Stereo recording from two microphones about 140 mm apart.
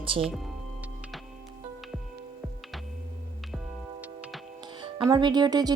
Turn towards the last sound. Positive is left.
turn(degrees=-30)  # may be behind; listen again after turning